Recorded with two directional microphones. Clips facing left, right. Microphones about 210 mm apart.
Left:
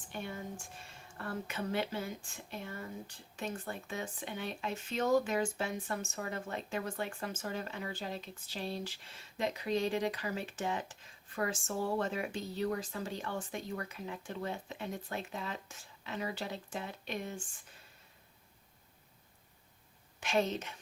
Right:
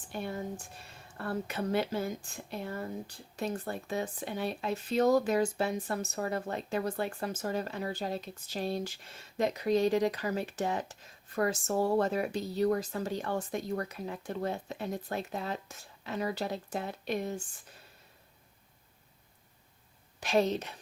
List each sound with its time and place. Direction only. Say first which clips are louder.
0.1 s speech: right 5 dB; 40° right (ahead or behind)
20.1 s speech: right 5 dB; 35° right (ahead or behind)